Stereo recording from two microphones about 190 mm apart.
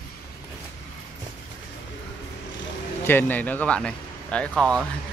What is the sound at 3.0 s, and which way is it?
Speech, 10° left (ahead or behind).